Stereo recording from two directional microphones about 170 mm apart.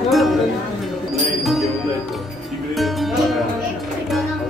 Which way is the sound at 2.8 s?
Centre (ahead or behind).